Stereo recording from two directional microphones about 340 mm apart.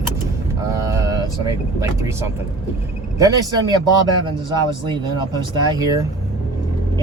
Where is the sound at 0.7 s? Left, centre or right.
Centre.